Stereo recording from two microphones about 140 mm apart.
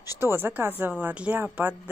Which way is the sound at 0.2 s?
15° right (ahead or behind).